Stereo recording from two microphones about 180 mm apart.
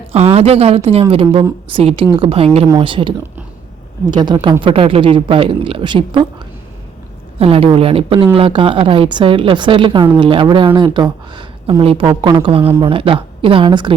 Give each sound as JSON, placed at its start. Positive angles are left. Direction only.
{"t": 0.1, "sound": "a woman's voice", "side_deg": -35}
{"t": 7.3, "sound": "speech", "side_deg": -35}